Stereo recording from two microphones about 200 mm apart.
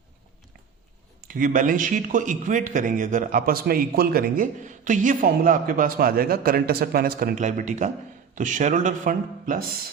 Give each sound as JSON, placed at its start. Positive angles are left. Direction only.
{"t": 1.3, "sound": "a man's voice", "side_deg": -40}